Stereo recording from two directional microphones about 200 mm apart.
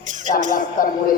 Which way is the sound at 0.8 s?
45° left (ahead or behind).